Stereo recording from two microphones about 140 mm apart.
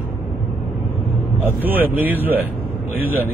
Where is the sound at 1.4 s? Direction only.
15° right (ahead or behind).